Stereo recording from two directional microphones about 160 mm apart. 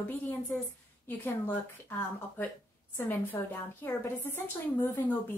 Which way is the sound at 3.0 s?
15° left (ahead or behind).